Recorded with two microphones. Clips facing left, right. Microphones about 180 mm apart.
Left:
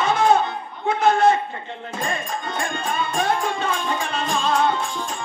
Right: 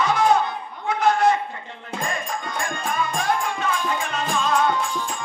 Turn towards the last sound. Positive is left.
turn(degrees=30)  # may be behind; listen again after turning